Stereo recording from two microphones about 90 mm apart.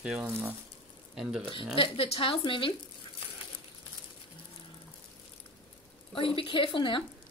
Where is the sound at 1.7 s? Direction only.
90° left; by 2.7 s 70° left (ahead or behind).